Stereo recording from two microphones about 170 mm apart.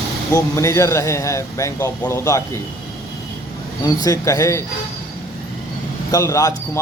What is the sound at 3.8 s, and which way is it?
Speech, 20° left (ahead or behind).